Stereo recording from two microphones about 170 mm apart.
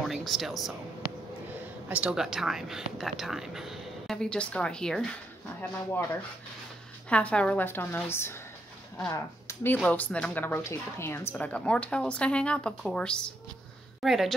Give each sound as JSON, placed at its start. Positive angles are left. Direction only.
{"t": 0.1, "sound": "speech", "side_deg": 0}
{"t": 1.9, "sound": "speech", "side_deg": -5}
{"t": 5.6, "sound": "a woman's voice", "side_deg": 15}
{"t": 7.1, "sound": "a woman's voice", "side_deg": 5}